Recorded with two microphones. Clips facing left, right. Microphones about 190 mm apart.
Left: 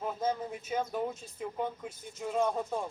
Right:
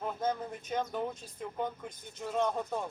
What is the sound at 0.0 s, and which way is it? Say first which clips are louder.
Speech: left 1 dB; 5° left (ahead or behind).